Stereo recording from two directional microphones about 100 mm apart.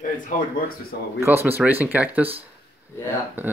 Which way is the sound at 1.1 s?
25° right (ahead or behind).